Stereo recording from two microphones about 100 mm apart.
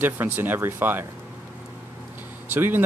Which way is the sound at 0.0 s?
20° right (ahead or behind).